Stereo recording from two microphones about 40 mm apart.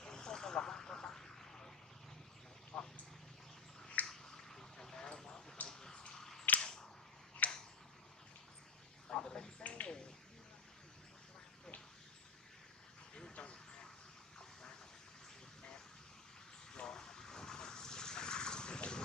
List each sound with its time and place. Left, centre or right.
0.0 s vehicle: centre
2.7 s vehicle: left
4.0 s finger snapping: centre
5.7 s a sound: centre
7.4 s tick-tock: left
9.1 s a sound: centre
9.6 s a sound: left
13.1 s vehicle: left
16.7 s vehicle: centre